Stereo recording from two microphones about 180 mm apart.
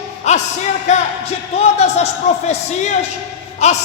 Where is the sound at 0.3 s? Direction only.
40° left (ahead or behind).